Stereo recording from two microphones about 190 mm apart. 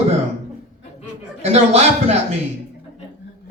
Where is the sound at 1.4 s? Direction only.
35° right (ahead or behind).